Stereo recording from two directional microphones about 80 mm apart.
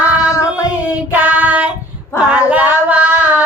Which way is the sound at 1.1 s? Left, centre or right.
Centre.